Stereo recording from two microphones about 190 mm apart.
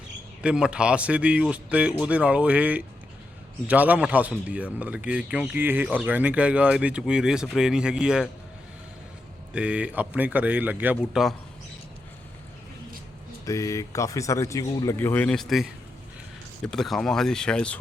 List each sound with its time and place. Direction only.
0.4 s a man's voice: 5° right (ahead or behind)
9.5 s a man's voice: 5° right (ahead or behind)
13.4 s speech: 15° left (ahead or behind); by 15.6 s centre (ahead or behind)
16.7 s speech: centre (ahead or behind)